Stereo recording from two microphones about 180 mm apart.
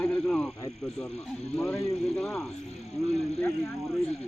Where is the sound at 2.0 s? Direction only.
Centre (ahead or behind).